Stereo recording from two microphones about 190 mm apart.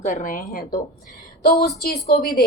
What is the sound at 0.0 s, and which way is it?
Speech, 40° left (ahead or behind).